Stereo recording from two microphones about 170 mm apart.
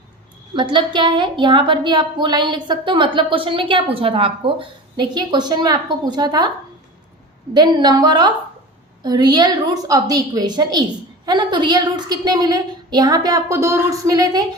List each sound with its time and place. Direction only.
0.5 s a woman's voice: 30° right (ahead or behind)
7.5 s a woman's voice: 25° right (ahead or behind)